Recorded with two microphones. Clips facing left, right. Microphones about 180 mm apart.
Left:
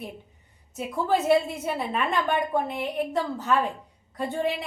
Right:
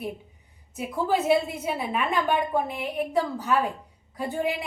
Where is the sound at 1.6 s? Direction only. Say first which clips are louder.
Even; 5° right (ahead or behind).